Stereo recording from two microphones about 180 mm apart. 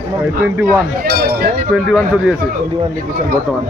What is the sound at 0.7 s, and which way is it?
Speech, 55° right (ahead or behind).